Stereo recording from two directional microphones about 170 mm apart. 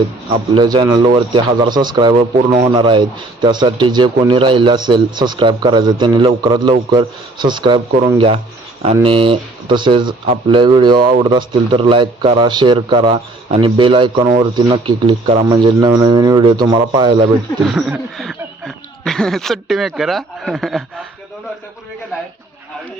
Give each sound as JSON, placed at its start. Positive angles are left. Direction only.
{"t": 0.5, "sound": "a man's voice", "side_deg": -25}
{"t": 8.8, "sound": "a man's voice", "side_deg": -35}
{"t": 17.6, "sound": "speech", "side_deg": 0}